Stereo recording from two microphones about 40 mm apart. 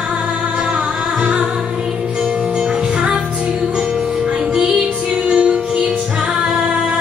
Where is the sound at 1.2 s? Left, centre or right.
Right.